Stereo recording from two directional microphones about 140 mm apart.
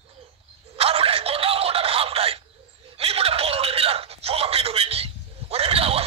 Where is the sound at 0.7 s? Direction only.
45° right (ahead or behind).